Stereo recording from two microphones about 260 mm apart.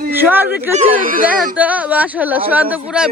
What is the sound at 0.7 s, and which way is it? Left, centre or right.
Speech, right.